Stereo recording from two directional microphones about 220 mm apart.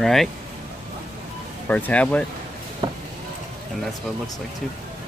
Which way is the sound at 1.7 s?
10° left (ahead or behind).